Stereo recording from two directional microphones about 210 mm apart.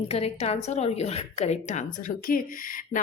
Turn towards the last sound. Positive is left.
turn(degrees=40)  # may be behind; listen again after turning